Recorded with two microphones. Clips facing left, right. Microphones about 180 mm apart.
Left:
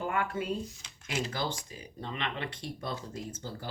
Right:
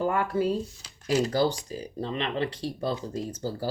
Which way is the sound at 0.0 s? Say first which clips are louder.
Right 7 dB; 35° right (ahead or behind).